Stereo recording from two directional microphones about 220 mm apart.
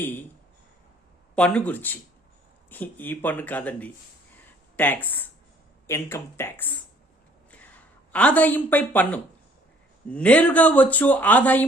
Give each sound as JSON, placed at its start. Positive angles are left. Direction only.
{"t": 1.4, "sound": "speech", "side_deg": 5}
{"t": 8.1, "sound": "speech", "side_deg": 5}